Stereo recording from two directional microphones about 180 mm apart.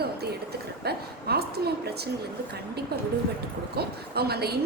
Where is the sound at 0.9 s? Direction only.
60° right (ahead or behind).